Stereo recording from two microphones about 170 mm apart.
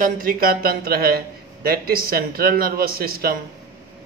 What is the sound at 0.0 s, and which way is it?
A man's voice, 55° right (ahead or behind).